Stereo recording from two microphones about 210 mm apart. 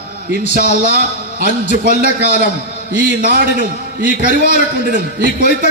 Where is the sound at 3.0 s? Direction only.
40° right (ahead or behind).